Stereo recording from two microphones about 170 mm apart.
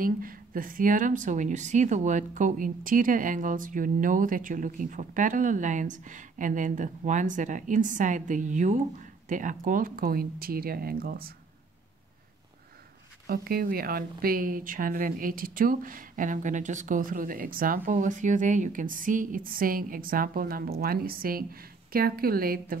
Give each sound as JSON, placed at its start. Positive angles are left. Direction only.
{"t": 0.0, "sound": "speech", "side_deg": -55}
{"t": 13.3, "sound": "speech", "side_deg": -65}